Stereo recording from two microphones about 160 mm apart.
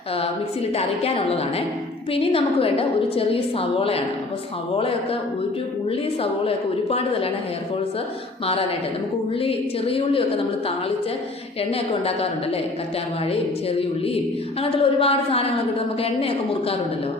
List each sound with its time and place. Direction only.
0.8 s a woman's voice: 40° left (ahead or behind)
9.4 s a woman's voice: 35° left (ahead or behind)
11.7 s a woman's voice: 40° left (ahead or behind)
14.6 s a woman's voice: 35° left (ahead or behind)